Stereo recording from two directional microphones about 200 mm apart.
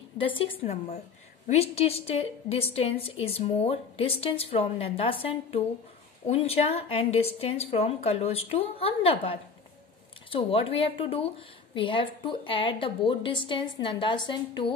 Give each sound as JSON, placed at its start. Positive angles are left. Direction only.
{"t": 0.2, "sound": "a woman's voice", "side_deg": 25}